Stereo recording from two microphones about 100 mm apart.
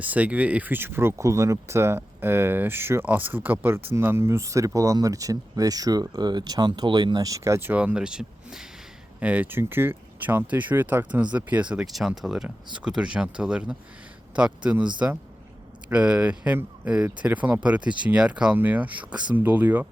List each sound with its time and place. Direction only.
0.0 s speech: 15° right (ahead or behind)
7.7 s speech: 15° right (ahead or behind)